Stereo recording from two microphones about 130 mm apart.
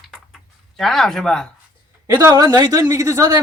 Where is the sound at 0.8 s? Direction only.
Centre (ahead or behind).